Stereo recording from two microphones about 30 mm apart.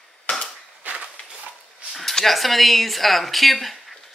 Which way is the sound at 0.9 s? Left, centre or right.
Right.